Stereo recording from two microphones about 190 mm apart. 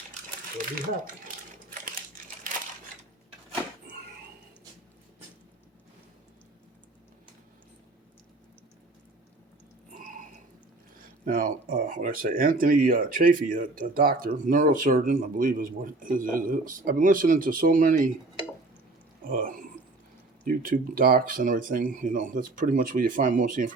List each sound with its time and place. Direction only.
9.9 s a sound: 45° right (ahead or behind)
11.3 s speech: 45° right (ahead or behind)
19.3 s speech: 45° right (ahead or behind)